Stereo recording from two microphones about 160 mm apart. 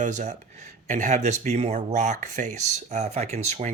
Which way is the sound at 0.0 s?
50° right (ahead or behind).